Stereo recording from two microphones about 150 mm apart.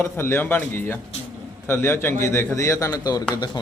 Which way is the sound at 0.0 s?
15° left (ahead or behind).